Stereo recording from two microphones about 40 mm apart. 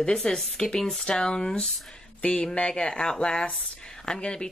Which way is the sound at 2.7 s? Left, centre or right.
Left.